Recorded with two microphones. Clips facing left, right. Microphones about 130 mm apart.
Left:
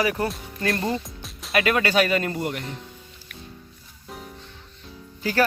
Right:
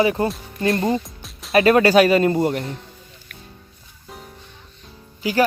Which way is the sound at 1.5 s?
35° right (ahead or behind).